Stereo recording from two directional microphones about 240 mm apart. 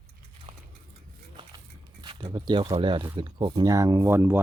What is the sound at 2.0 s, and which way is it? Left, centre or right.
Speech, centre.